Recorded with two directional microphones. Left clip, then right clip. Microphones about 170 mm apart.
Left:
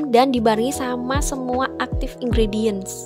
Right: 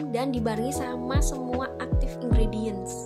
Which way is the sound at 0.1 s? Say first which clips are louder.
Left 13 dB; 50° left (ahead or behind).